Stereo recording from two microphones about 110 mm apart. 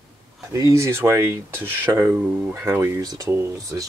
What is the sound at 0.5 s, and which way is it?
Speech, 30° right (ahead or behind).